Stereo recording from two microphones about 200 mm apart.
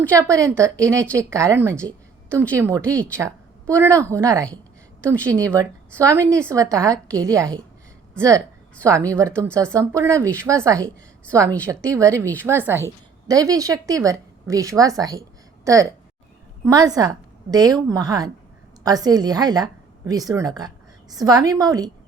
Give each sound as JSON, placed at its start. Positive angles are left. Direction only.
{"t": 0.0, "sound": "speech", "side_deg": -15}
{"t": 2.8, "sound": "speech", "side_deg": 5}
{"t": 3.1, "sound": "a woman's voice", "side_deg": -15}
{"t": 8.8, "sound": "a woman's voice", "side_deg": -15}